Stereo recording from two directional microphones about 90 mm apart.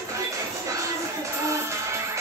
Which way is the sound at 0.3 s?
35° right (ahead or behind).